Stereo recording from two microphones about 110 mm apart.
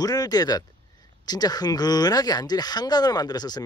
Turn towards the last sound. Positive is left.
turn(degrees=40)  # may be behind; listen again after turning